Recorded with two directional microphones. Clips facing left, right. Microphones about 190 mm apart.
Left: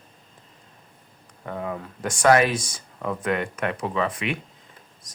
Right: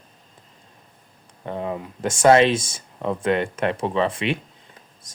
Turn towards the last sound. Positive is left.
turn(degrees=-25)  # may be behind; listen again after turning